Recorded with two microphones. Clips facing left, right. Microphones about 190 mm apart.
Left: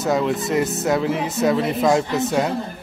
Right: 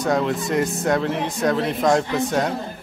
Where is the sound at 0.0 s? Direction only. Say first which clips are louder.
Left 1 dB; centre (ahead or behind).